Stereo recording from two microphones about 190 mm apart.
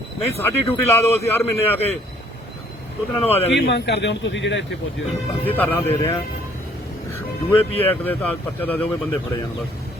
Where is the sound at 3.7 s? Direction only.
65° left (ahead or behind).